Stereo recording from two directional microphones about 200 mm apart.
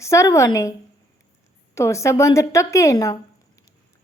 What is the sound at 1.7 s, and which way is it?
A woman's voice, 15° left (ahead or behind).